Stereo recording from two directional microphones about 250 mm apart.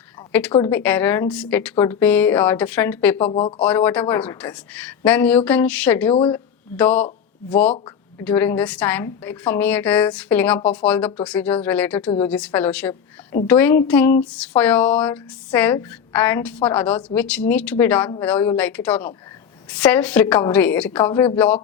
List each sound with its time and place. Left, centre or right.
0.2 s a sound: centre
0.5 s a woman's voice: centre
3.2 s speech: left
3.6 s a woman's voice: centre